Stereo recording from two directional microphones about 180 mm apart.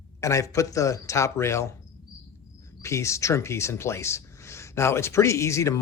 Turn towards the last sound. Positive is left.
turn(degrees=15)  # may be behind; listen again after turning